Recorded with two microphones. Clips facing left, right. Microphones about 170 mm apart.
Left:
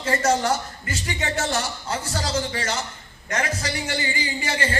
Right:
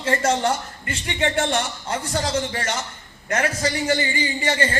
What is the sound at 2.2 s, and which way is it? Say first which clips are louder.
Speech: right 2 dB; 35° left (ahead or behind).